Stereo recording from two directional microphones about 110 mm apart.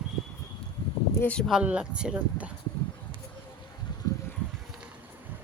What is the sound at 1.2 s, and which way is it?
Speech, 10° left (ahead or behind).